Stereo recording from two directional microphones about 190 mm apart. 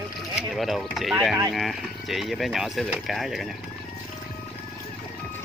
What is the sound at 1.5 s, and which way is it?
Speech, centre (ahead or behind).